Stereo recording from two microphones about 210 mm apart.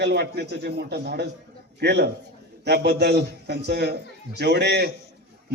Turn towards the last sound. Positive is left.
turn(degrees=-55)  # may be behind; listen again after turning